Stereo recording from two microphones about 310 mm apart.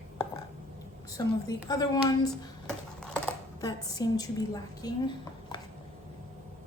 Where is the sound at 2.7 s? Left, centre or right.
Centre.